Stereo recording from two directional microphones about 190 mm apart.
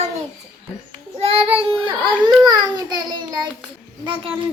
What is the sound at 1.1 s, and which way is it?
Child singing, 30° right (ahead or behind).